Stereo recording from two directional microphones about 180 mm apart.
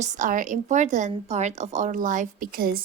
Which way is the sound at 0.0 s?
45° right (ahead or behind).